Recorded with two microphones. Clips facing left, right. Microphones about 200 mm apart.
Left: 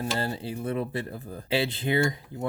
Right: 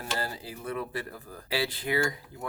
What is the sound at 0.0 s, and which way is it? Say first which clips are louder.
Speech: left 5 dB; 25° left (ahead or behind).